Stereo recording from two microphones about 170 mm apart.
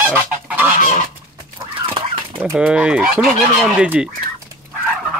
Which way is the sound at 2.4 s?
5° right (ahead or behind).